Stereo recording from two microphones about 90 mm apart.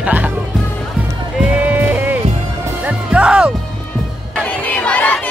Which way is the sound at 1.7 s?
20° right (ahead or behind).